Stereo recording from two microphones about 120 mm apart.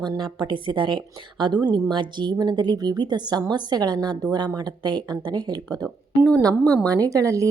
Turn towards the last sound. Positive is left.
turn(degrees=-25)  # may be behind; listen again after turning